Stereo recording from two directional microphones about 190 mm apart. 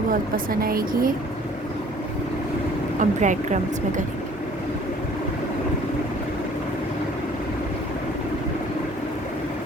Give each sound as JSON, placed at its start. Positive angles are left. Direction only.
{"t": 0.1, "sound": "a woman's voice", "side_deg": -50}
{"t": 3.0, "sound": "a woman's voice", "side_deg": -40}